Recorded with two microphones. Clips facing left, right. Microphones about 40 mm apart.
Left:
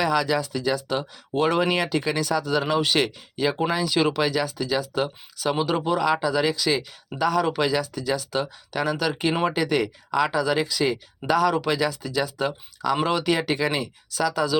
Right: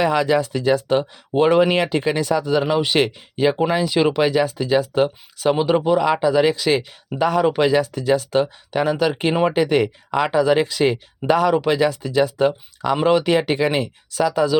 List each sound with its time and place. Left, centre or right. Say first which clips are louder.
0.0 s speech: right 5 dB; right
1.3 s speech: right 6 dB; centre
3.0 s speech: right 6 dB; right
5.8 s speech: right 6 dB; centre
6.1 s speech: right 5 dB; right